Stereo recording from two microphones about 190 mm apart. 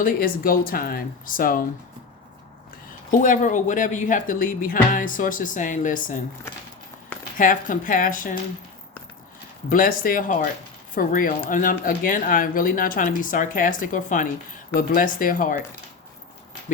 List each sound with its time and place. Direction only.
0.0 s speech: 50° left (ahead or behind)
3.1 s speech: 45° left (ahead or behind)
7.3 s speech: 45° left (ahead or behind)
9.6 s speech: 45° left (ahead or behind)